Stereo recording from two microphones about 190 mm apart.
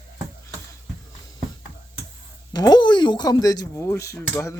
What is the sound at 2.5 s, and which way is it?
Speech, 20° left (ahead or behind).